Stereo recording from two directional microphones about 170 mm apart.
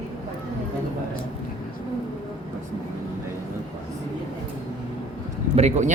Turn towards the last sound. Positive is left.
turn(degrees=-40)  # may be behind; listen again after turning